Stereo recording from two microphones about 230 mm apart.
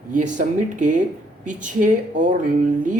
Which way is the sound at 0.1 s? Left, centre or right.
Right.